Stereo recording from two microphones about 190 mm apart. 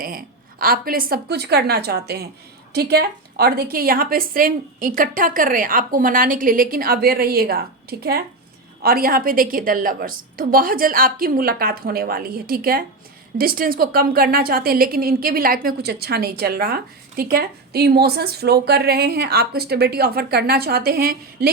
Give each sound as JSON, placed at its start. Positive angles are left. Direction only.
{"t": 0.0, "sound": "a woman's voice", "side_deg": -50}